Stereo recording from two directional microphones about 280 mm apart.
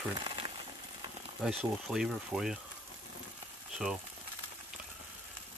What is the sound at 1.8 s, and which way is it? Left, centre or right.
Speech, centre.